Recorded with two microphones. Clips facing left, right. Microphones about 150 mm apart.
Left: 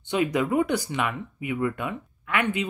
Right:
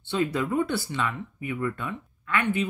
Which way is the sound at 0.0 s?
15° left (ahead or behind).